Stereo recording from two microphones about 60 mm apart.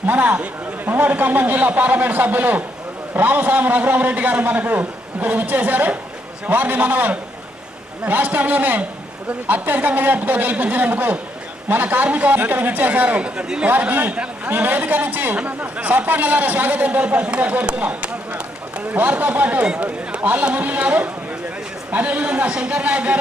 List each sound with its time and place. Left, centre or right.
0.0 s a man's voice: right
13.7 s a man's voice: right